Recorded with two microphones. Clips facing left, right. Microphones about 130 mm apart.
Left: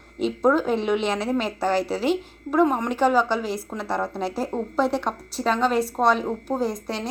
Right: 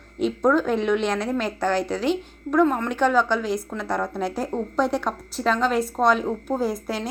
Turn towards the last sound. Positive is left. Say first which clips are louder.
# right 1 dB
turn(degrees=-5)  # may be behind; listen again after turning